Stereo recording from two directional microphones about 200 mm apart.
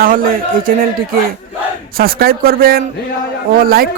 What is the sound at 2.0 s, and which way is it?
Speech, 50° right (ahead or behind).